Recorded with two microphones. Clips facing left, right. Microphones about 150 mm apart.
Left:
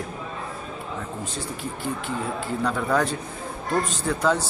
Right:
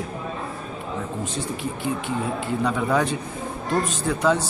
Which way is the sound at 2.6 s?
10° right (ahead or behind).